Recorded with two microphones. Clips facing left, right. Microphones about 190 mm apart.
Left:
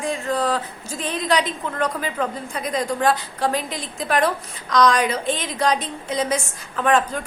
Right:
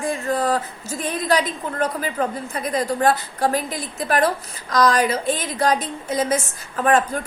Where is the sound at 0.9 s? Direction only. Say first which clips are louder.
Right 1 dB; 10° right (ahead or behind).